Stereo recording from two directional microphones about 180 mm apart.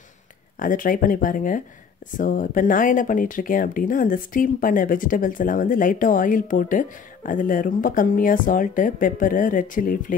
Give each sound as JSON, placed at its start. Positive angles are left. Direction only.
{"t": 0.6, "sound": "speech", "side_deg": 50}